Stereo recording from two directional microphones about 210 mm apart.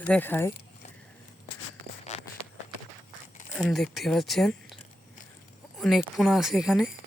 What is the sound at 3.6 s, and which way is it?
Speech, centre (ahead or behind).